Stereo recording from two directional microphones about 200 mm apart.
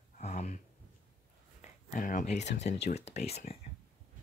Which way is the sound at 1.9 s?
40° left (ahead or behind).